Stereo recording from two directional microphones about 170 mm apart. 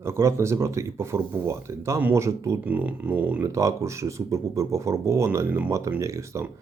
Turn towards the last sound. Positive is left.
turn(degrees=-15)  # may be behind; listen again after turning